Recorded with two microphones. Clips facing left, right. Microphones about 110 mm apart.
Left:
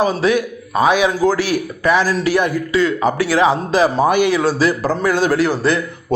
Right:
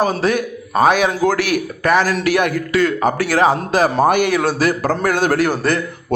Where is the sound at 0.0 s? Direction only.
45° right (ahead or behind).